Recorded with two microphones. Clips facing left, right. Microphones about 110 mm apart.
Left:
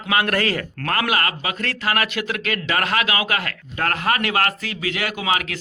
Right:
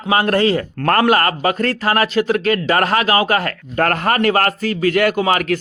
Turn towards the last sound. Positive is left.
turn(degrees=-45)  # may be behind; listen again after turning